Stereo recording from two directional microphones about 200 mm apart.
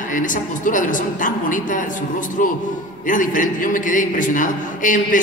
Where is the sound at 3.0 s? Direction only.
40° left (ahead or behind).